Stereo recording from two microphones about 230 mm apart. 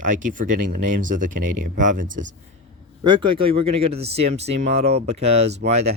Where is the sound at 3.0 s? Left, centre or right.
Centre.